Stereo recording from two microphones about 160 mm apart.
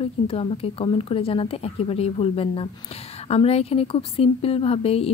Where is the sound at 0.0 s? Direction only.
35° left (ahead or behind).